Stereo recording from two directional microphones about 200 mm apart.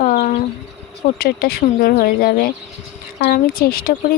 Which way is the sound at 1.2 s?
50° left (ahead or behind).